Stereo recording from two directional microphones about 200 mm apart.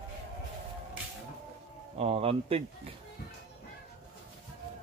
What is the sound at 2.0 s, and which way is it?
Speech, 30° right (ahead or behind).